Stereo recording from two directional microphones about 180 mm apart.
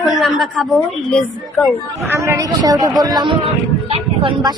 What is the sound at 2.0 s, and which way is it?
A woman's voice, 15° right (ahead or behind).